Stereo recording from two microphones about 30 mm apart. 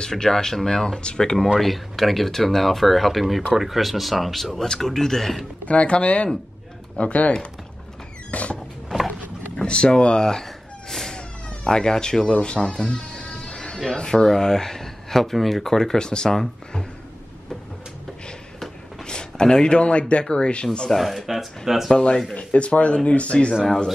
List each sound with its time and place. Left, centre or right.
0.0 s speech: centre
1.6 s speech: centre
5.7 s speech: left
7.0 s speech: left
8.3 s a sound: left
9.6 s speech: left
10.9 s cat: centre
11.1 s cat: left
13.8 s speech: left
16.0 s speech: left
19.0 s speech: left
20.9 s speech: centre
22.5 s speech: left